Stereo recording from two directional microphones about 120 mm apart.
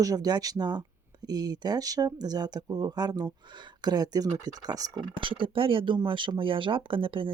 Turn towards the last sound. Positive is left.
turn(degrees=-45)  # may be behind; listen again after turning